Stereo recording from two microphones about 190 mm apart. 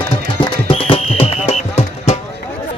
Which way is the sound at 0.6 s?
30° left (ahead or behind).